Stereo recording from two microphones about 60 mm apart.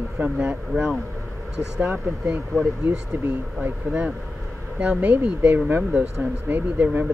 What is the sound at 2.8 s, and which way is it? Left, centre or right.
Speech, right.